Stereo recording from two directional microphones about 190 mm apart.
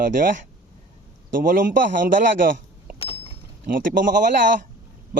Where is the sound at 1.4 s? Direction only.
45° right (ahead or behind).